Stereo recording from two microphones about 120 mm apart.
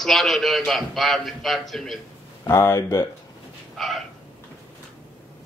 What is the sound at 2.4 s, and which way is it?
Speech, 25° left (ahead or behind).